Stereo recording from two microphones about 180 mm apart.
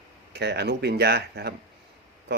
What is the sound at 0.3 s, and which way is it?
Speech, 65° right (ahead or behind).